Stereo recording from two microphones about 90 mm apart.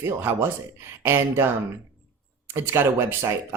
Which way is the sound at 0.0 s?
25° right (ahead or behind).